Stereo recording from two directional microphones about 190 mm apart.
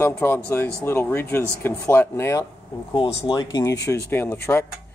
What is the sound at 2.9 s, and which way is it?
Speech, 25° left (ahead or behind).